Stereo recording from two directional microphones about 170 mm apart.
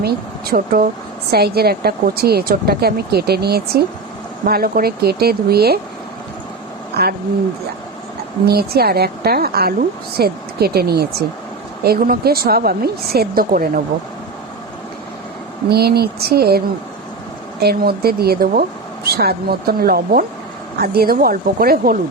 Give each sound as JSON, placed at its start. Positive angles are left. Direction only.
{"t": 0.0, "sound": "a woman's voice", "side_deg": -60}
{"t": 8.4, "sound": "a woman's voice", "side_deg": -65}
{"t": 15.7, "sound": "a woman's voice", "side_deg": -70}